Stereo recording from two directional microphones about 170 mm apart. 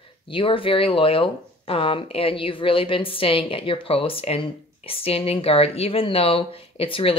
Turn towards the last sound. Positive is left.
turn(degrees=35)  # may be behind; listen again after turning